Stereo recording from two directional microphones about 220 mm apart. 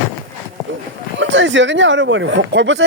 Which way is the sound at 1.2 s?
55° right (ahead or behind).